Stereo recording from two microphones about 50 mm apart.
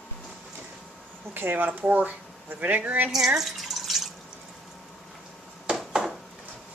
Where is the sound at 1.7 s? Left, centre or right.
Right.